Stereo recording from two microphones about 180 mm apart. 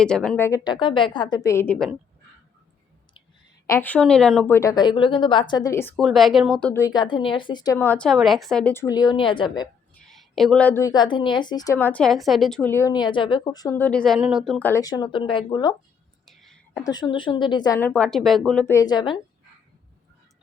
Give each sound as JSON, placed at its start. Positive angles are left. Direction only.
{"t": 0.0, "sound": "a woman's voice", "side_deg": 5}
{"t": 3.7, "sound": "speech", "side_deg": 10}
{"t": 4.5, "sound": "a woman's voice", "side_deg": 20}
{"t": 6.0, "sound": "speech", "side_deg": 0}
{"t": 6.8, "sound": "a woman's voice", "side_deg": 25}
{"t": 9.9, "sound": "a woman's voice", "side_deg": 0}
{"t": 12.7, "sound": "a woman's voice", "side_deg": 20}
{"t": 14.7, "sound": "a woman's voice", "side_deg": 20}
{"t": 16.2, "sound": "whispering", "side_deg": 0}
{"t": 16.8, "sound": "a woman's voice", "side_deg": 25}
{"t": 17.7, "sound": "speech", "side_deg": 10}
{"t": 18.6, "sound": "a woman's voice", "side_deg": 15}